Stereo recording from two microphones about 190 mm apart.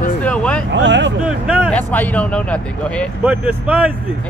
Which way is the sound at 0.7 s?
70° right (ahead or behind).